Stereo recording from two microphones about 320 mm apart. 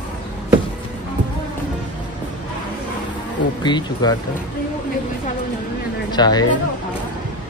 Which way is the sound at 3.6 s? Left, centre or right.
Centre.